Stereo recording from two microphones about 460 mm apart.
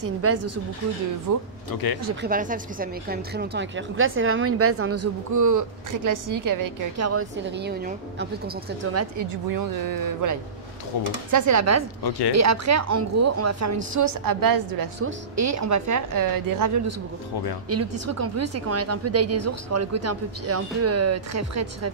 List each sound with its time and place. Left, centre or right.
0.0 s a woman's voice: right
1.3 s a woman's voice: right
2.2 s a woman's voice: centre
9.3 s a woman's voice: right